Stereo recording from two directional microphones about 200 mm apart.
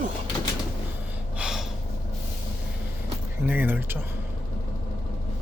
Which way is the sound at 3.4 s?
10° right (ahead or behind).